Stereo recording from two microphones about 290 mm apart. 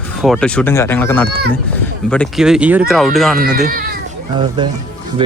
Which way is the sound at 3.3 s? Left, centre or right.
Right.